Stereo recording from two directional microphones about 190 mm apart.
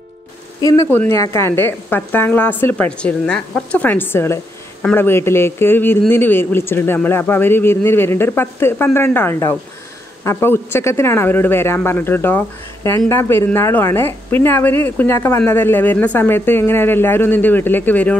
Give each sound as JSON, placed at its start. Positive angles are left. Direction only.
{"t": 0.6, "sound": "speech", "side_deg": 15}